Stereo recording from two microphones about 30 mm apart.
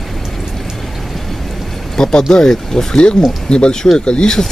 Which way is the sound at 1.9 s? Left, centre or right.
Centre.